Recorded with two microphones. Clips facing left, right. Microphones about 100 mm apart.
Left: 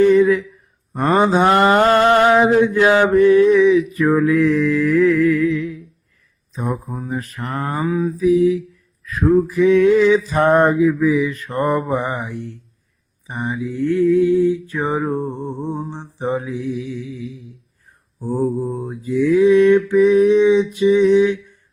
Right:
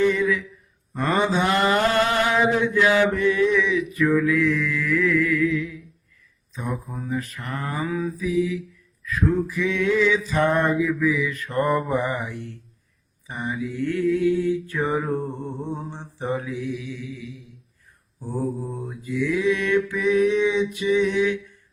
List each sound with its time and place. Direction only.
0.0 s a sound: 40° left (ahead or behind)
0.9 s mantra: 25° left (ahead or behind)
1.3 s mantra: 45° left (ahead or behind)
7.1 s male singing: 45° left (ahead or behind); by 8.1 s 25° left (ahead or behind)
8.2 s male singing: 40° left (ahead or behind); by 12.4 s 25° left (ahead or behind)
13.2 s mantra: 25° left (ahead or behind)
18.3 s mantra: 25° left (ahead or behind)
18.9 s male singing: 40° left (ahead or behind)